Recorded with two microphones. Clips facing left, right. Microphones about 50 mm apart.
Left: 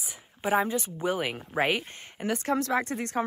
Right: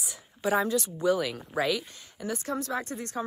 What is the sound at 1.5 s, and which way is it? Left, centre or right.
Speech, left.